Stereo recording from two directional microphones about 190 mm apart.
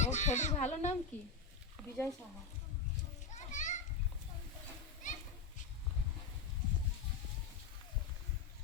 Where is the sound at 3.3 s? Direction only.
40° left (ahead or behind).